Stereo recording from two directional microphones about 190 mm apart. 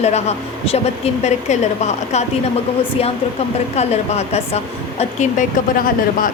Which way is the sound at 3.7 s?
35° left (ahead or behind).